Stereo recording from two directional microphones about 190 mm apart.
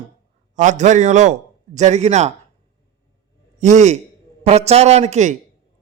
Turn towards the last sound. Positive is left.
turn(degrees=-40)  # may be behind; listen again after turning